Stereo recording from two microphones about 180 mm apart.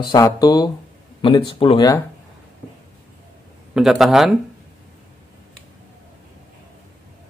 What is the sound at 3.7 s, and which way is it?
Speech, centre (ahead or behind).